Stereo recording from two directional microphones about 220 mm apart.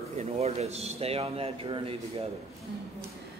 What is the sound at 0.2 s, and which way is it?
A man's voice, 30° right (ahead or behind).